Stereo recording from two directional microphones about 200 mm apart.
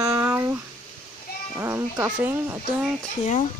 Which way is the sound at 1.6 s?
15° right (ahead or behind).